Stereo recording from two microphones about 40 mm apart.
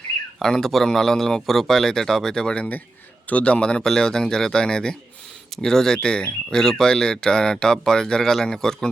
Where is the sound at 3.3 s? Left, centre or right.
Left.